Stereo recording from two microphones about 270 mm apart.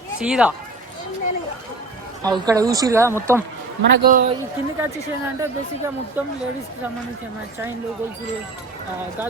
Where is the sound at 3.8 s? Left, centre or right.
Right.